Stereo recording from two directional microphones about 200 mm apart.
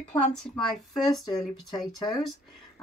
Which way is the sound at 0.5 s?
Centre (ahead or behind).